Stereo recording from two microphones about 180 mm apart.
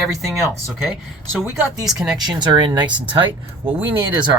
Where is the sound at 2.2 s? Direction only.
25° right (ahead or behind).